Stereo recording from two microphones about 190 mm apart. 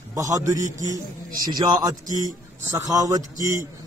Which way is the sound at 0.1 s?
15° right (ahead or behind).